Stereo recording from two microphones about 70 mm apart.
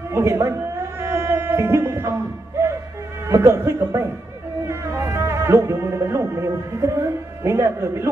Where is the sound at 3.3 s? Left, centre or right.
Right.